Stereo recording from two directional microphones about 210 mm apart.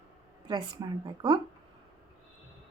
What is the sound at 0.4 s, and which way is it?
Speech, 20° right (ahead or behind).